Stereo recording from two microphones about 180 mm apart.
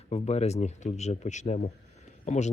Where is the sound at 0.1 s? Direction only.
35° left (ahead or behind).